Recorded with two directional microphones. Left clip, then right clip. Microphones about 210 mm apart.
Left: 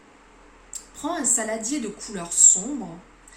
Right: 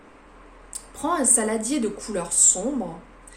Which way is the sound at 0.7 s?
50° right (ahead or behind).